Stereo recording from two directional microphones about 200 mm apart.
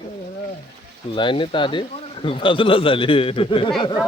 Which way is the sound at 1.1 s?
25° left (ahead or behind).